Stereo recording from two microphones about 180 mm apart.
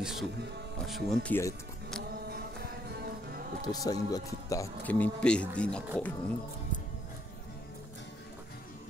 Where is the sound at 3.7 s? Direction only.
20° left (ahead or behind).